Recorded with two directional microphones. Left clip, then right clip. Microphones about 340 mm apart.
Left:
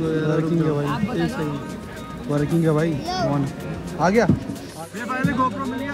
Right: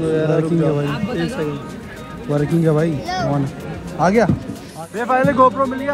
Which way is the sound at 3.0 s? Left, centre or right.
Right.